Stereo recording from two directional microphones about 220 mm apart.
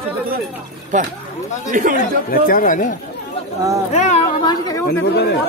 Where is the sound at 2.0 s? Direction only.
40° left (ahead or behind).